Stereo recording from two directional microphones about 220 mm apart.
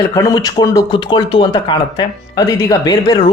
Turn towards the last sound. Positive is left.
turn(degrees=20)  # may be behind; listen again after turning